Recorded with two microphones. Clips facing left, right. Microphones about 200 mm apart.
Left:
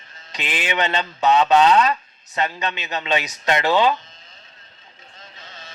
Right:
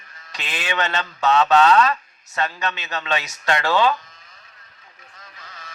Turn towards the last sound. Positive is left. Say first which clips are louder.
# left 1 dB
turn(degrees=25)  # may be behind; listen again after turning